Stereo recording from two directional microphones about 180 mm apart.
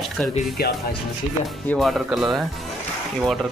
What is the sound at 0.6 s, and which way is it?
Speech, 60° left (ahead or behind).